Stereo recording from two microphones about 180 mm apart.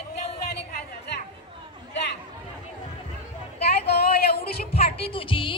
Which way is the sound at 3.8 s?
60° left (ahead or behind).